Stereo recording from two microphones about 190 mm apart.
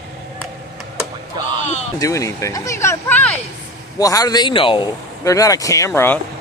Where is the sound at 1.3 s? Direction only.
20° right (ahead or behind).